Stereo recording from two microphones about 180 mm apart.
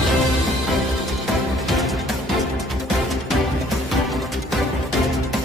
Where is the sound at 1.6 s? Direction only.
Centre (ahead or behind).